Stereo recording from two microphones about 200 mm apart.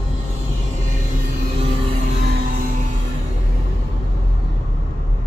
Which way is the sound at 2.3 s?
45° right (ahead or behind).